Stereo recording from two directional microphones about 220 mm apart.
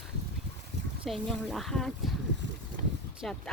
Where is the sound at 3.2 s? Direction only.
Centre (ahead or behind).